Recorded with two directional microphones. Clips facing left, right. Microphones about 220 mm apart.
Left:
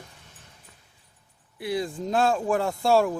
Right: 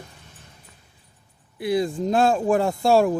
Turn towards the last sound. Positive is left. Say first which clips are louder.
# right 3 dB
turn(degrees=-15)  # may be behind; listen again after turning